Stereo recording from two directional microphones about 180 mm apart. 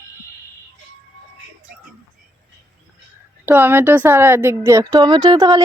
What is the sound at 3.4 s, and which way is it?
Speech, 10° right (ahead or behind).